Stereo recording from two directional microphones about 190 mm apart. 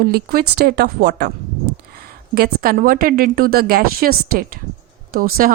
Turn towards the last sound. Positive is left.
turn(degrees=-50)  # may be behind; listen again after turning